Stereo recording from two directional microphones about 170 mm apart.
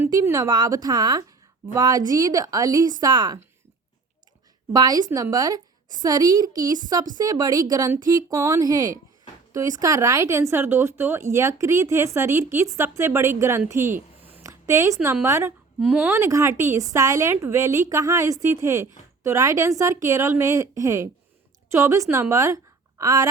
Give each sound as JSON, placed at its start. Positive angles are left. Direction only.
{"t": 0.0, "sound": "speech", "side_deg": -20}
{"t": 4.7, "sound": "speech", "side_deg": -25}
{"t": 14.4, "sound": "a sound", "side_deg": -15}
{"t": 15.0, "sound": "a woman's voice", "side_deg": -15}